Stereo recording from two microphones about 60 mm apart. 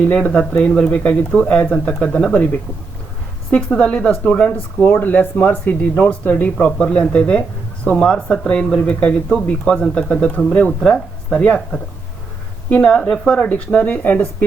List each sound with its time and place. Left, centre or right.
0.0 s a woman's voice: left
4.8 s speech: left
12.7 s speech: centre